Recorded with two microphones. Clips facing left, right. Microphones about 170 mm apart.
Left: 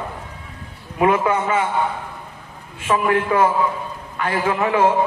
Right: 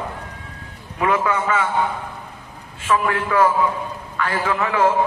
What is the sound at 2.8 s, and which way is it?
A man's voice, 30° left (ahead or behind).